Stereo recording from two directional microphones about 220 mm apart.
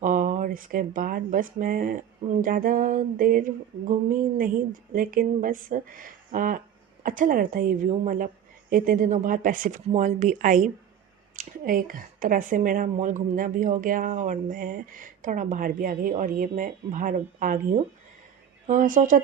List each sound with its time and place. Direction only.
0.0 s speech: 35° right (ahead or behind)